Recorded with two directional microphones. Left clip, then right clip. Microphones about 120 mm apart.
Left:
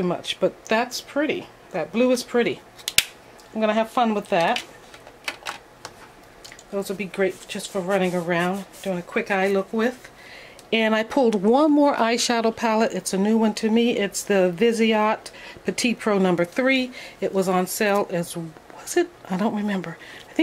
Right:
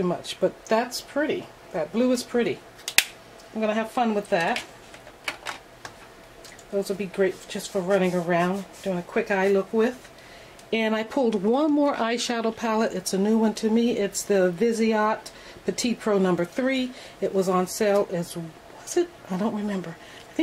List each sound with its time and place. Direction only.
0.0 s speech: 35° left (ahead or behind)
3.5 s speech: 45° left (ahead or behind)
5.2 s typewriter: 15° left (ahead or behind)
6.8 s speech: 45° left (ahead or behind)